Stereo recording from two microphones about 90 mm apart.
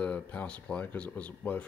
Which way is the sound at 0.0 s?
15° left (ahead or behind).